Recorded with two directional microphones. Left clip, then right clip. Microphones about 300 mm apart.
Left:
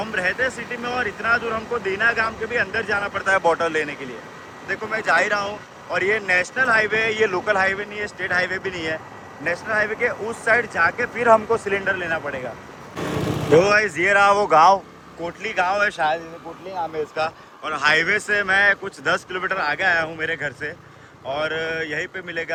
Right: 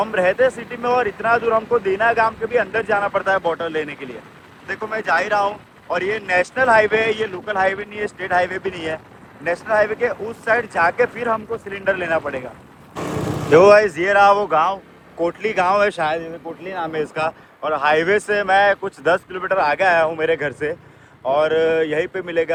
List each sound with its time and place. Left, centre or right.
0.1 s speech: centre
11.3 s speech: centre
11.9 s speech: centre
13.0 s vehicle: centre
13.6 s speech: centre
15.2 s speech: centre